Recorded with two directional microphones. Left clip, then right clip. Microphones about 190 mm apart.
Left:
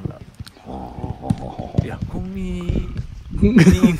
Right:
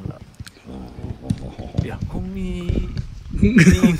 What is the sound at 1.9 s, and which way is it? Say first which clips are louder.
A man's voice: left 1 dB; 5° left (ahead or behind).